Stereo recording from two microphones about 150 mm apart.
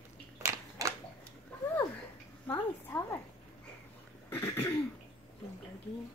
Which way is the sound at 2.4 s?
15° left (ahead or behind).